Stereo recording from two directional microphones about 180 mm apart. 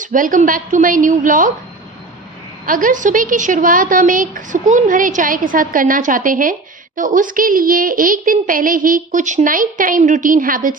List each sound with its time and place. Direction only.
0.0 s a woman's voice: 45° right (ahead or behind)
2.6 s a woman's voice: 50° right (ahead or behind)